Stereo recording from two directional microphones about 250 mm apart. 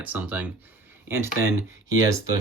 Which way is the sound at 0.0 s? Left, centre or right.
Centre.